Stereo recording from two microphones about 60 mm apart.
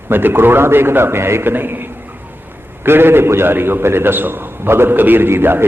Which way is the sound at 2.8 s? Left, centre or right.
Right.